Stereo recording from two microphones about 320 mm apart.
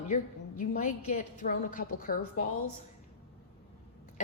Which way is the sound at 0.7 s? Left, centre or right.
Left.